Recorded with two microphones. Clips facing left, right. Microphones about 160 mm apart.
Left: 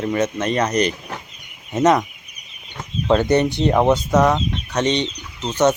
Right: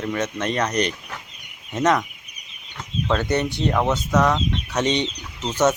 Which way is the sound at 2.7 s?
20° left (ahead or behind).